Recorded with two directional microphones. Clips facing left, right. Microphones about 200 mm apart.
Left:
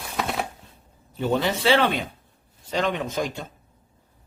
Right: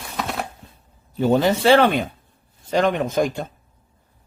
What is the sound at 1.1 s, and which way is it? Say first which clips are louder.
Speech: right 6 dB; 45° right (ahead or behind).